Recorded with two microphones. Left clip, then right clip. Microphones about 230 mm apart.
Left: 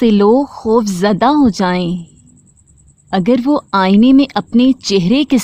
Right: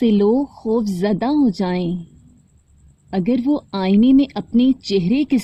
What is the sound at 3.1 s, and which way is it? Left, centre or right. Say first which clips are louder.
Speech: left 7 dB; left.